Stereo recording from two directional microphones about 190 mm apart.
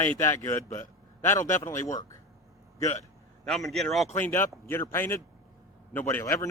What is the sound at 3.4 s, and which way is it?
Speech, centre (ahead or behind).